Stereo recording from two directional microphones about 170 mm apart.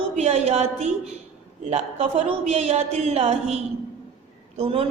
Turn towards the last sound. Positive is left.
turn(degrees=-35)  # may be behind; listen again after turning